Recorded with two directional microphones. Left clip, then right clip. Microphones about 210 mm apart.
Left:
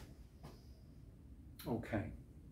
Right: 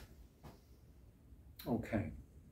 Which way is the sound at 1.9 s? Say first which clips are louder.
Even; 10° right (ahead or behind).